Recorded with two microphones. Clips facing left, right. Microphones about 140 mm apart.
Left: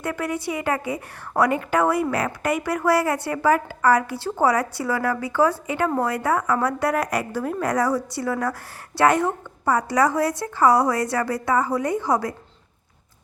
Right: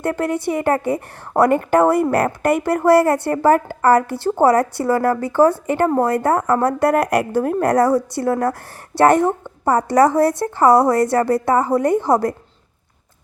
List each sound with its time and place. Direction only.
0.0 s a woman's voice: 50° right (ahead or behind)
8.9 s speech: 20° right (ahead or behind)
9.6 s a woman's voice: 55° right (ahead or behind)